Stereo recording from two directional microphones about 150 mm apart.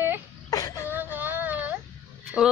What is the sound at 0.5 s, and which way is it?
Throat clearing, 20° left (ahead or behind).